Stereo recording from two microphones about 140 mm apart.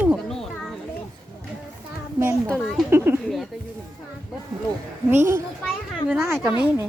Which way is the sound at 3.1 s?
15° right (ahead or behind).